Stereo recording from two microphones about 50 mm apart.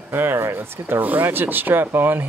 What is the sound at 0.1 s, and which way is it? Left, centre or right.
Speech, right.